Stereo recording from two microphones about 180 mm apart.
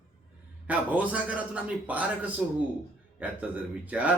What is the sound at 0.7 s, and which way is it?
A man's voice, 10° right (ahead or behind).